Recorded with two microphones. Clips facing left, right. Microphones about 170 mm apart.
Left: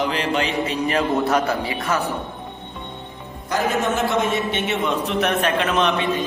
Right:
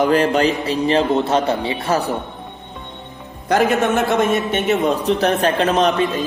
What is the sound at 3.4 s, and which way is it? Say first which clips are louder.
Speech: right 6 dB; 70° right (ahead or behind).